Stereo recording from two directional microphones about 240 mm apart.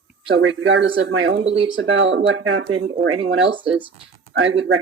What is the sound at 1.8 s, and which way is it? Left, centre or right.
Speech, right.